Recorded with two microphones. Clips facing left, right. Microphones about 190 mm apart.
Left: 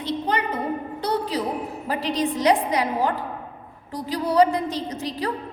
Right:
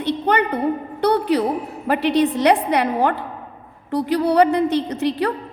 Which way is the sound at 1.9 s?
65° right (ahead or behind).